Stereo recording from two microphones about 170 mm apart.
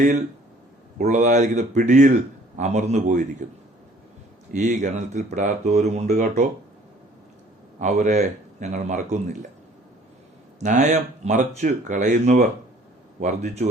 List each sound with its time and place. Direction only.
0.9 s a man's voice: 45° right (ahead or behind)
4.5 s a man's voice: 45° right (ahead or behind)
7.8 s a man's voice: 45° right (ahead or behind)
10.6 s a man's voice: 45° right (ahead or behind)